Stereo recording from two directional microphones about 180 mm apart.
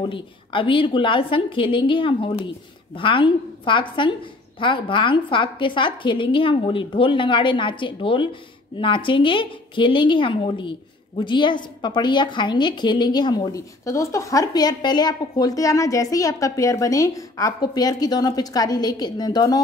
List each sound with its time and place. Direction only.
0.1 s a woman's voice: 30° left (ahead or behind)